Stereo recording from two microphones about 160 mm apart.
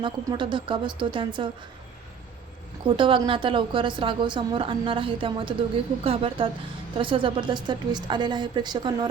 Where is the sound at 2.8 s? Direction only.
30° right (ahead or behind).